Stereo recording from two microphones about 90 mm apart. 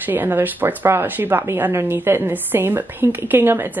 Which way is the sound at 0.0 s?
20° right (ahead or behind).